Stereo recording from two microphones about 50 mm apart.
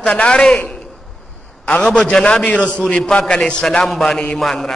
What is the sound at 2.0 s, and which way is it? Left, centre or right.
Speech, centre.